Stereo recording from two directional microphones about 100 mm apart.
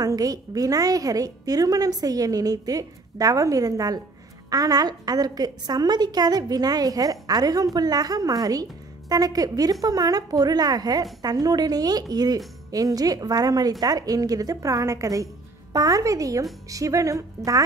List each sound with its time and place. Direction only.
0.0 s a woman's voice: 40° right (ahead or behind)